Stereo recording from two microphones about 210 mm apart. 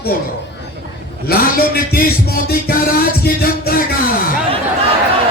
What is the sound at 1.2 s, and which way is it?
Music, 45° left (ahead or behind).